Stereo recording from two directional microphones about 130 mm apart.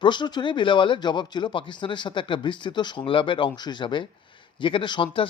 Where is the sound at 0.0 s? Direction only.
35° left (ahead or behind).